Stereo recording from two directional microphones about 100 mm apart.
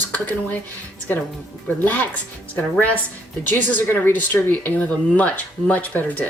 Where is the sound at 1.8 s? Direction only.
15° left (ahead or behind).